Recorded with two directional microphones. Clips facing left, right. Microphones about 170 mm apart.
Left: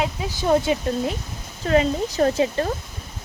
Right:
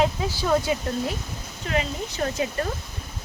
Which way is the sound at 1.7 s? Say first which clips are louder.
Left 8 dB; 35° left (ahead or behind).